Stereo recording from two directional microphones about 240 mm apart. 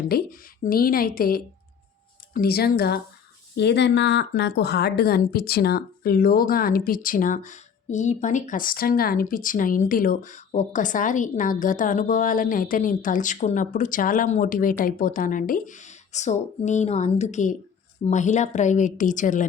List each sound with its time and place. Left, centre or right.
0.1 s a woman's voice: left